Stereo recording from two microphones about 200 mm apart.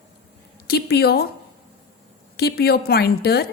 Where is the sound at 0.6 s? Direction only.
55° left (ahead or behind).